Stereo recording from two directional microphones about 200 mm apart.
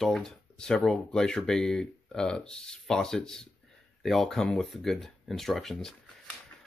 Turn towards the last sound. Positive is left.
turn(degrees=0)  # may be behind; listen again after turning